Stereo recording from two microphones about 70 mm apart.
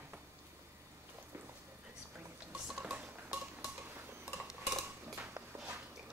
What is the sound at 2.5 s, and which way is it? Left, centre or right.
Dishes, centre.